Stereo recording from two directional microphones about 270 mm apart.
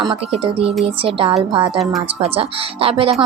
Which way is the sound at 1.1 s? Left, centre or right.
Centre.